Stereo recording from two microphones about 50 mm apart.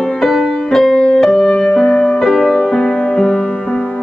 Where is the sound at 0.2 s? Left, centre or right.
Centre.